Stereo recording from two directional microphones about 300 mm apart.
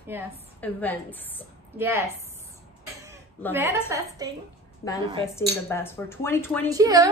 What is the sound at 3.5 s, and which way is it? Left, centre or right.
Speech, centre.